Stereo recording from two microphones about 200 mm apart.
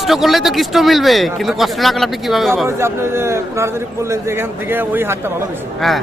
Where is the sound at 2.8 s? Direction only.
10° right (ahead or behind).